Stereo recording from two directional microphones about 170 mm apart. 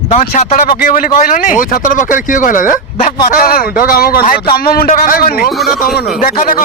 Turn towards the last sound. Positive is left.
turn(degrees=55)  # may be behind; listen again after turning